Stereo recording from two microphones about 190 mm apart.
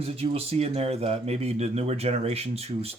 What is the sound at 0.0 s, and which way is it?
Speech, 30° right (ahead or behind).